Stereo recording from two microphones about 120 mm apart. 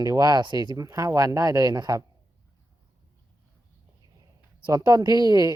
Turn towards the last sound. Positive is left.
turn(degrees=-35)  # may be behind; listen again after turning